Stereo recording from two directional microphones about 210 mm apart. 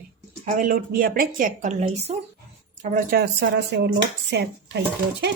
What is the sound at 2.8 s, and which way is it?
Speech, 45° right (ahead or behind).